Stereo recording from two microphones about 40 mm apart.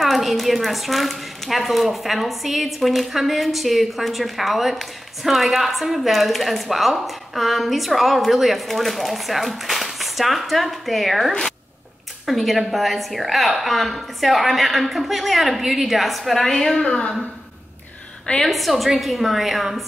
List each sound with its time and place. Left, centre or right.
0.0 s a woman's voice: centre
16.7 s a woman's voice: left
18.4 s a woman's voice: centre